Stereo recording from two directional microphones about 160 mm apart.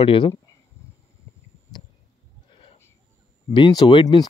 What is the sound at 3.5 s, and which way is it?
Speech, 30° left (ahead or behind).